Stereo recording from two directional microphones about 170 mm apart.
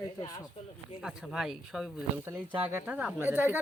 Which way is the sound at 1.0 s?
Centre (ahead or behind).